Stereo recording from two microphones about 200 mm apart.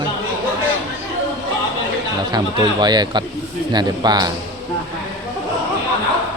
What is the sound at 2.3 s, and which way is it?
Speech, 20° right (ahead or behind).